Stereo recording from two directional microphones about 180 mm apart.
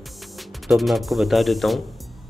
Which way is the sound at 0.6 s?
Centre (ahead or behind).